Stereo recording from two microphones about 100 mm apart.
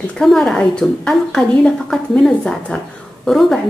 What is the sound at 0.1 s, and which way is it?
A woman's voice, 5° left (ahead or behind).